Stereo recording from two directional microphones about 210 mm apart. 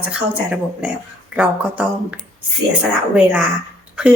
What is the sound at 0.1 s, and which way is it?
A woman's voice, 5° right (ahead or behind).